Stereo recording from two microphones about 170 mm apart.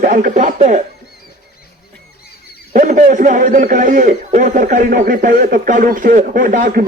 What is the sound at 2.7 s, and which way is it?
A man's voice, 50° right (ahead or behind).